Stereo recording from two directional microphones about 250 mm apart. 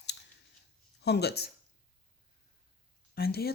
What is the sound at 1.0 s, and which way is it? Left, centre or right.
Speech, left.